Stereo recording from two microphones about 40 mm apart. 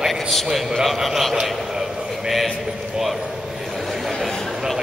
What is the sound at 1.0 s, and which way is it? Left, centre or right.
Speech, centre.